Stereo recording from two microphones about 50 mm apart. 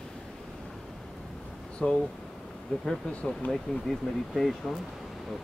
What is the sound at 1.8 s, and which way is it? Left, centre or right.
Speech, centre.